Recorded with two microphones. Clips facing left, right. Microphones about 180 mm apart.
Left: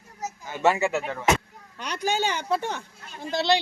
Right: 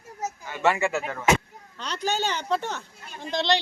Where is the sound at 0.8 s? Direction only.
Centre (ahead or behind).